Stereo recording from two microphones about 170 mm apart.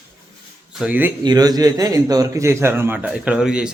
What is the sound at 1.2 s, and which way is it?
A man's voice, 25° right (ahead or behind).